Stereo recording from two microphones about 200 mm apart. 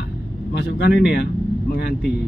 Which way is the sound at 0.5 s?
55° left (ahead or behind).